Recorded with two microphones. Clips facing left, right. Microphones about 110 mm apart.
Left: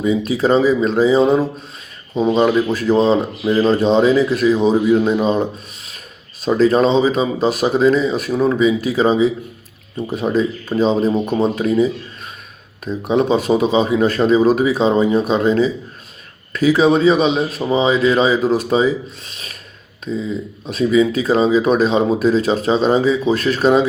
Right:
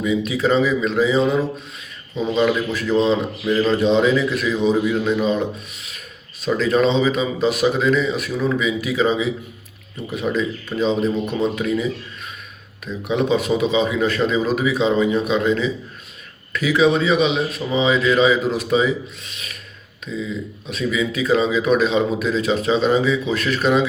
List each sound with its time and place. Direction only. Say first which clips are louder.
0.0 s speech: left 3 dB; 35° left (ahead or behind)
6.4 s speech: left 4 dB; 35° left (ahead or behind)